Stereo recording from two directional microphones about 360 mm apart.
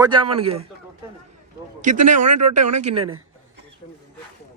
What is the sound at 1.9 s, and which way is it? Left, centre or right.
Speech, right.